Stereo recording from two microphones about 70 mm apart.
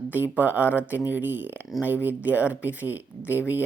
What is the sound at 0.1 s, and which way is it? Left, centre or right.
A man's voice, right.